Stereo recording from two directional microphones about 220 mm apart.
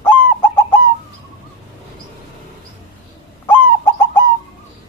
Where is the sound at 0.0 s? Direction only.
10° left (ahead or behind).